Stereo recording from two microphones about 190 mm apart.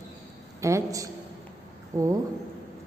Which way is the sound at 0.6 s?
15° right (ahead or behind).